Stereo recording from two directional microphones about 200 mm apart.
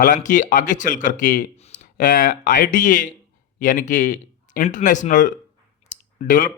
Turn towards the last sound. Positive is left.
turn(degrees=40)  # may be behind; listen again after turning